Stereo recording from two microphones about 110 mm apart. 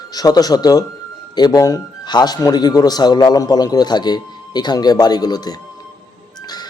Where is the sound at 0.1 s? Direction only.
35° left (ahead or behind).